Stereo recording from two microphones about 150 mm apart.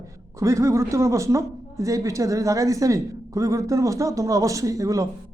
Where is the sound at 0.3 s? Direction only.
20° right (ahead or behind).